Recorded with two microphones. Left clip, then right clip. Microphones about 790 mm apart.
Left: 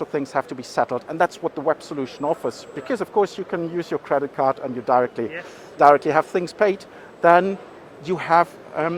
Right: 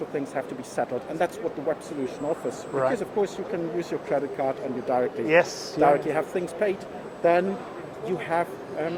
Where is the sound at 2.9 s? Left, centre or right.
Left.